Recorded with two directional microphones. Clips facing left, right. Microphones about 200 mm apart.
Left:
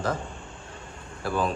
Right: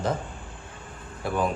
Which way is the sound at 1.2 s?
15° right (ahead or behind).